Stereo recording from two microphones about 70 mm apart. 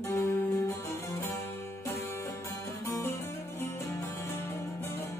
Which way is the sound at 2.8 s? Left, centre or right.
Left.